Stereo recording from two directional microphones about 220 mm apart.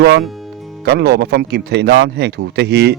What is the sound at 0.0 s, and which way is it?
Speech, 45° right (ahead or behind).